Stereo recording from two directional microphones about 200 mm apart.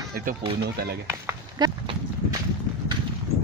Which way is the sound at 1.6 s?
20° right (ahead or behind).